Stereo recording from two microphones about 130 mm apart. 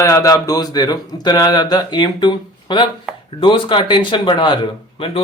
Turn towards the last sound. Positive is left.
turn(degrees=45)  # may be behind; listen again after turning